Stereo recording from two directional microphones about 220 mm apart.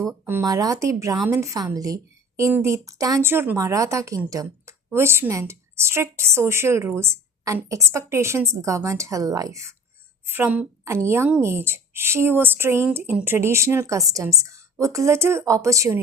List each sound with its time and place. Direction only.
0.0 s a woman's voice: 10° right (ahead or behind)